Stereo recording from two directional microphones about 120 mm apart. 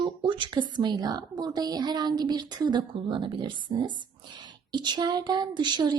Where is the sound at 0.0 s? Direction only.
45° right (ahead or behind).